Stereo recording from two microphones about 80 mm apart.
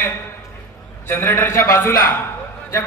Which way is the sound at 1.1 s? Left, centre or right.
Left.